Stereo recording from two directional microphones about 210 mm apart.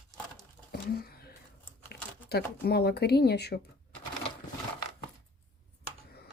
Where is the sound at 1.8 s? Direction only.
50° left (ahead or behind).